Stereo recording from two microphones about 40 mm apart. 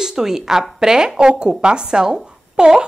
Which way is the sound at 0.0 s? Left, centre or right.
Centre.